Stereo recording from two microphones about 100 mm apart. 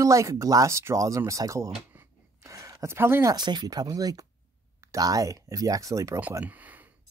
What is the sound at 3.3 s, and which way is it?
Speech, 45° right (ahead or behind).